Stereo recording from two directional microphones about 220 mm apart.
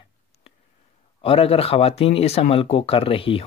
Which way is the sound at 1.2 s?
25° left (ahead or behind).